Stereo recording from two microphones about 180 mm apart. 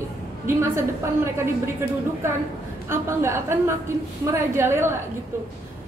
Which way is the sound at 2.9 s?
15° right (ahead or behind).